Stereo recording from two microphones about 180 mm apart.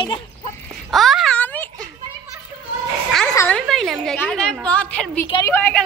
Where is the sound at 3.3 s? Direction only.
15° left (ahead or behind).